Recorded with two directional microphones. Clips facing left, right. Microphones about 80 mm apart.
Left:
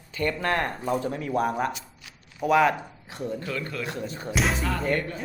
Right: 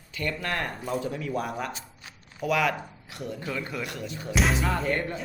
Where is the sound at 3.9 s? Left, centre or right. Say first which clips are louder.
Left 3 dB; left.